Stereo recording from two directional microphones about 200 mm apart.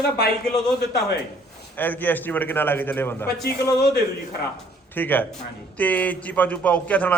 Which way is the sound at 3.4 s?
55° left (ahead or behind).